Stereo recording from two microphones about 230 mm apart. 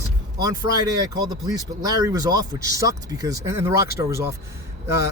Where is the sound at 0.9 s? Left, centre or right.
Centre.